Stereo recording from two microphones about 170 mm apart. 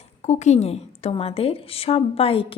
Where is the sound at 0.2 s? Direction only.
40° left (ahead or behind).